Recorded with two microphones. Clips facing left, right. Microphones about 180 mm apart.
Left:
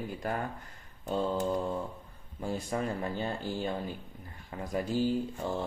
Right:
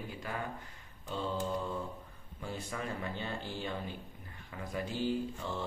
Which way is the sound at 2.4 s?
40° left (ahead or behind).